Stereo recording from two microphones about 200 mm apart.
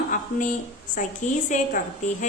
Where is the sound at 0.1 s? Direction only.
40° left (ahead or behind).